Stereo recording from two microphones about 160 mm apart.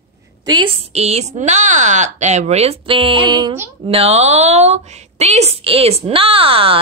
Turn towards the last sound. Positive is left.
turn(degrees=-35)  # may be behind; listen again after turning